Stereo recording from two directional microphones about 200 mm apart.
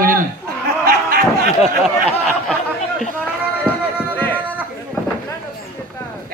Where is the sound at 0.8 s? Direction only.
50° right (ahead or behind).